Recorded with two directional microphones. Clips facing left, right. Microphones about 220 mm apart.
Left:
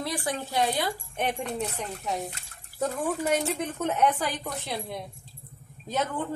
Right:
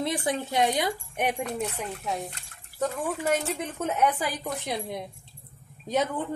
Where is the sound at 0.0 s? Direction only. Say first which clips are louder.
Right 3 dB; 20° right (ahead or behind).